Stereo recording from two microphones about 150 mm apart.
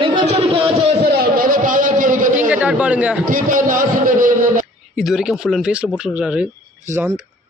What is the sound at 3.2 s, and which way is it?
A man's voice, 65° right (ahead or behind).